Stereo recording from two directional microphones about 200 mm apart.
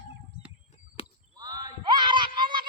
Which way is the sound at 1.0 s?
30° left (ahead or behind).